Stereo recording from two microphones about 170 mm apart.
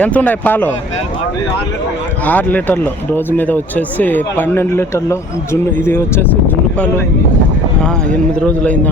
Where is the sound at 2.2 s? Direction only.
10° left (ahead or behind).